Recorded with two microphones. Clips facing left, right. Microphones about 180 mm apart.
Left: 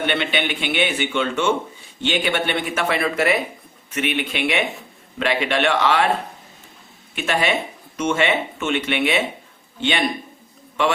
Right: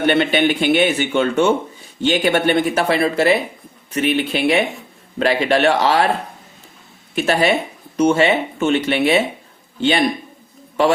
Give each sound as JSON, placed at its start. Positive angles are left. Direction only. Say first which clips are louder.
{"t": 0.0, "sound": "speech", "louder": "right 7 dB", "side_deg": -40}
{"t": 7.2, "sound": "speech", "louder": "right 5 dB", "side_deg": -40}